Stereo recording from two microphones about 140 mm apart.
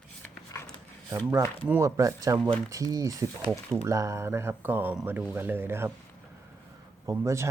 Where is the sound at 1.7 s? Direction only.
20° right (ahead or behind).